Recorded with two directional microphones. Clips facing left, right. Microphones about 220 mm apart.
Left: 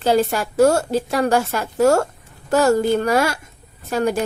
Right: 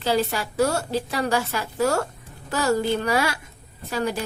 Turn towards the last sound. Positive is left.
turn(degrees=45)  # may be behind; listen again after turning